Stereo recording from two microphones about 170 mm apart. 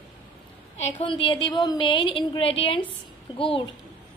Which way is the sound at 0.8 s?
35° left (ahead or behind).